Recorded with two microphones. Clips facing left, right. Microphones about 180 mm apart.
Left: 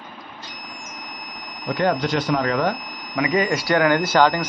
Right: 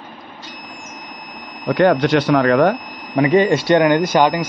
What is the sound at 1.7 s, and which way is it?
Speech, 70° right (ahead or behind).